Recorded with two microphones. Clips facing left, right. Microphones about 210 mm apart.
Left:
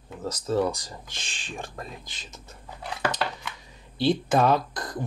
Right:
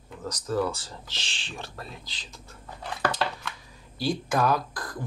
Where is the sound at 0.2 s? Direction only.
25° left (ahead or behind).